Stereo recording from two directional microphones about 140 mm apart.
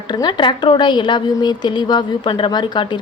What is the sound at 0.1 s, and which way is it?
A woman's voice, 30° left (ahead or behind).